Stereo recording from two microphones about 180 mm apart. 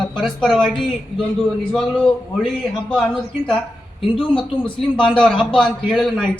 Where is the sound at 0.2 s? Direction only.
5° left (ahead or behind).